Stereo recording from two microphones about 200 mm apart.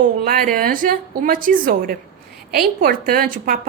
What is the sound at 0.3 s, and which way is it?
A woman's voice, 45° right (ahead or behind).